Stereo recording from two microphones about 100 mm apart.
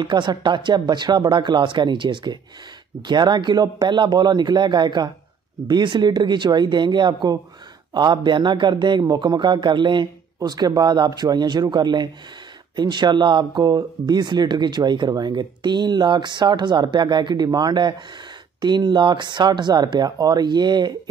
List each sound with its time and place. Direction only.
0.0 s speech: 50° right (ahead or behind)